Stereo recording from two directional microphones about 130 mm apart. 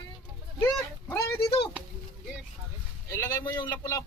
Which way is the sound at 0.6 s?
15° left (ahead or behind).